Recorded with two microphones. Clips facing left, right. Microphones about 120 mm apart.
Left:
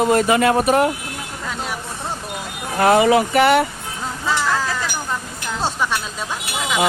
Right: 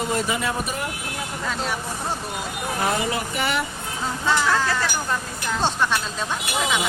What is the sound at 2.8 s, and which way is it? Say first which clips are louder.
Speech: left 12 dB; 90° left.